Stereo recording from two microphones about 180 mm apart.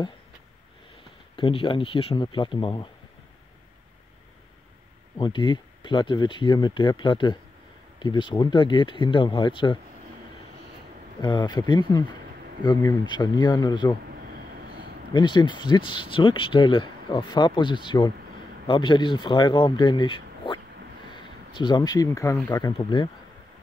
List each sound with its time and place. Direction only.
1.3 s speech: 30° left (ahead or behind)
5.1 s speech: 25° left (ahead or behind)
11.1 s speech: 25° left (ahead or behind)
15.1 s speech: 25° left (ahead or behind)